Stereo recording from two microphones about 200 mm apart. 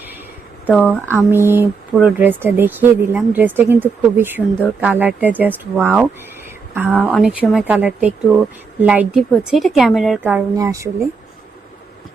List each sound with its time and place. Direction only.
0.8 s speech: 10° right (ahead or behind)
6.9 s speech: 10° left (ahead or behind)
7.2 s a woman's voice: 5° right (ahead or behind)
10.6 s speech: 15° right (ahead or behind)